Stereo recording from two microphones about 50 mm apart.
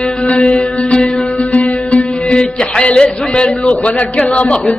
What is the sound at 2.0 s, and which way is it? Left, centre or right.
Music, centre.